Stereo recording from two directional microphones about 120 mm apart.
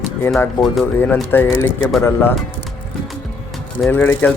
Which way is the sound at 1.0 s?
15° left (ahead or behind).